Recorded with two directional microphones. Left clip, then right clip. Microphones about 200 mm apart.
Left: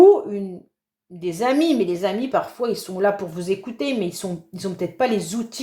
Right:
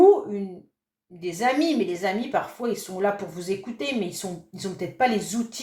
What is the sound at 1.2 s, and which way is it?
Speech, 40° left (ahead or behind).